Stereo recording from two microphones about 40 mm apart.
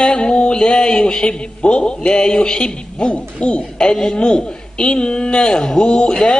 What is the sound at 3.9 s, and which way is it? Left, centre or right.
A man's voice, centre.